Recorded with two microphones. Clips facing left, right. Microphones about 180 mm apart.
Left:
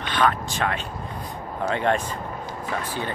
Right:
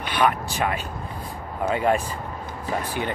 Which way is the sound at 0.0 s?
10° right (ahead or behind).